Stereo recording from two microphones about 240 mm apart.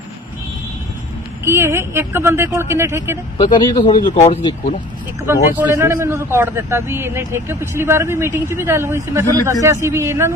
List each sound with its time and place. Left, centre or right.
1.5 s a man's voice: centre
3.3 s speech: centre
5.6 s a man's voice: centre